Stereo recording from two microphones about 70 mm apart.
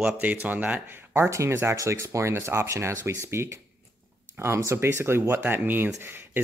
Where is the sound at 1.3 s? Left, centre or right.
Right.